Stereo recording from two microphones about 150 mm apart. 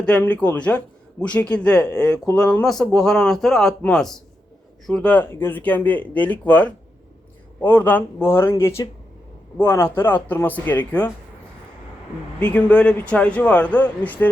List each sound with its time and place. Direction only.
0.0 s a man's voice: 10° left (ahead or behind)
12.4 s speech: 10° left (ahead or behind)